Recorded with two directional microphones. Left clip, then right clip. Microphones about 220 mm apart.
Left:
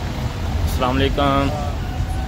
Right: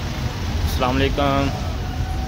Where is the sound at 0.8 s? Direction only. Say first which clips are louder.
Left 1 dB; centre (ahead or behind).